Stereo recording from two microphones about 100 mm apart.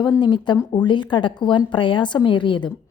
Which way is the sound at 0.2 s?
50° left (ahead or behind).